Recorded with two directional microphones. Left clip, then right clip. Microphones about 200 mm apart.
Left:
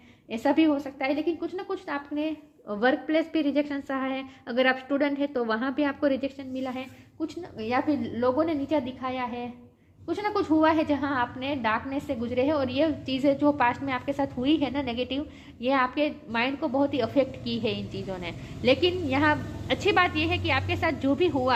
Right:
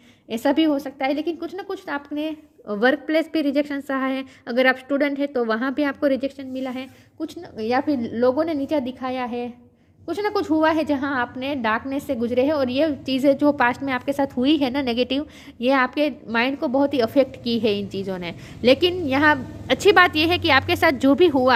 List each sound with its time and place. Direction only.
0.3 s a woman's voice: 50° right (ahead or behind)